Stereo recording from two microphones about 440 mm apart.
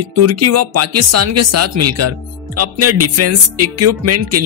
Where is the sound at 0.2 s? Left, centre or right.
Right.